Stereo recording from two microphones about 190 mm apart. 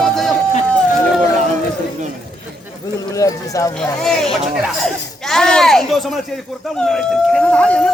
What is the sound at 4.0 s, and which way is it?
Speech, centre (ahead or behind).